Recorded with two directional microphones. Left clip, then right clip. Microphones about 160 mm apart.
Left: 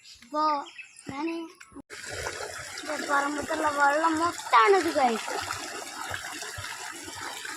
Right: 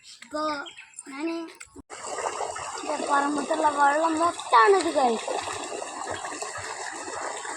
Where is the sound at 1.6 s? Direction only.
20° right (ahead or behind).